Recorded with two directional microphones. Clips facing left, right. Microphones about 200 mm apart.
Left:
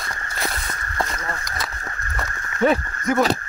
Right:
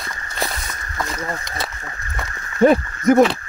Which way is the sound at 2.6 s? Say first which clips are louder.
Right 5 dB; 40° right (ahead or behind).